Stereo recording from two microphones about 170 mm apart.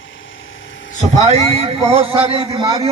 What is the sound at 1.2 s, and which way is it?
A man's voice, 40° right (ahead or behind).